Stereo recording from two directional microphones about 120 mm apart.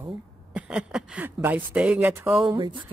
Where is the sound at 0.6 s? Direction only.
10° right (ahead or behind).